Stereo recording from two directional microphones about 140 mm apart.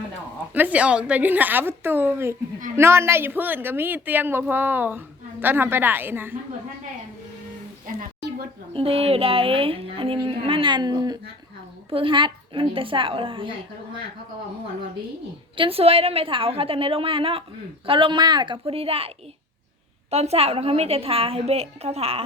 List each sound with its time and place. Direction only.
0.5 s a woman's voice: 10° right (ahead or behind)
8.7 s speech: 45° right (ahead or behind)
11.9 s speech: 40° right (ahead or behind)
15.5 s a woman's voice: 40° right (ahead or behind)